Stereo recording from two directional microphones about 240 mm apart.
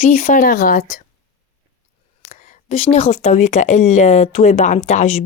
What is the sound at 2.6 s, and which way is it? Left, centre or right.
Speech, left.